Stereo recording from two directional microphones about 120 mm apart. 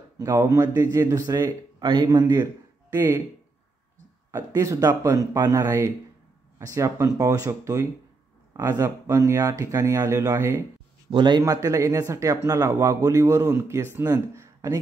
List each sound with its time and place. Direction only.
0.2 s speech: 25° right (ahead or behind)
4.3 s speech: 30° right (ahead or behind)
11.1 s speech: 40° right (ahead or behind)